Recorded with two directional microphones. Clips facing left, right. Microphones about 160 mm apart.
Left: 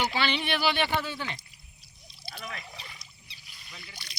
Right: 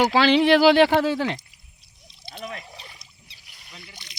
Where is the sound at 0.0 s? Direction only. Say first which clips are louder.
Right 12 dB; 90° right.